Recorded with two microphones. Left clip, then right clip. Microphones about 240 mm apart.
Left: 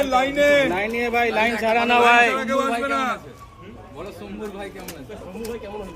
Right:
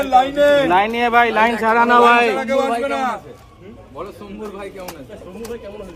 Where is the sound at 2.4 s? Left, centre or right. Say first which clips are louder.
Right 4 dB; centre.